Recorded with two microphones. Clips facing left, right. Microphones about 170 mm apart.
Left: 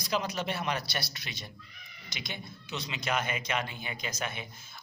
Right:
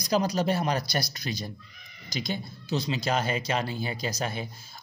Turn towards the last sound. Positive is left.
turn(degrees=-35)  # may be behind; listen again after turning